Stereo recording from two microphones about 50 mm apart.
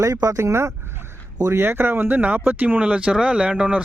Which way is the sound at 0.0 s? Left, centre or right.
Right.